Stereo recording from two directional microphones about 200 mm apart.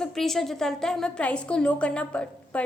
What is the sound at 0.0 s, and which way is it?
A woman's voice, centre (ahead or behind).